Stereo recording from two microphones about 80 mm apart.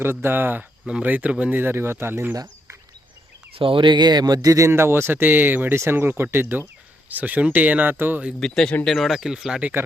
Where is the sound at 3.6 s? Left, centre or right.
Right.